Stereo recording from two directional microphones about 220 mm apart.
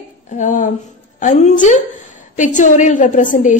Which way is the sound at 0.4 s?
35° left (ahead or behind).